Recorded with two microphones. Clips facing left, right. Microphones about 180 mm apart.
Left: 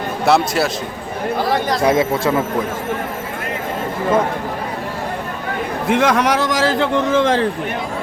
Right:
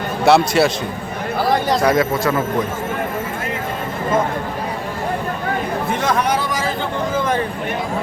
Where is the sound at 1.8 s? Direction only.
25° left (ahead or behind).